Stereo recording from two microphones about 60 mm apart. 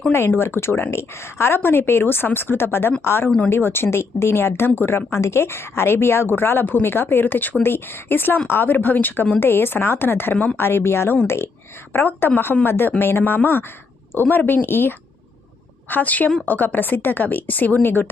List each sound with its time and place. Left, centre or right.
0.3 s speech: left
10.3 s a woman's voice: centre
10.6 s a woman's voice: left